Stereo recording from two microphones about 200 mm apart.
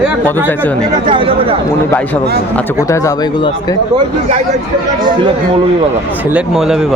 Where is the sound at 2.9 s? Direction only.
15° left (ahead or behind).